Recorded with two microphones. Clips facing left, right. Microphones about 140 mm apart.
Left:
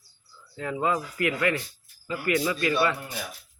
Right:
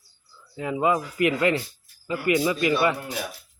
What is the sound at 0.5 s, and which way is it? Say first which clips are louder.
A man's voice: right 4 dB; 15° right (ahead or behind).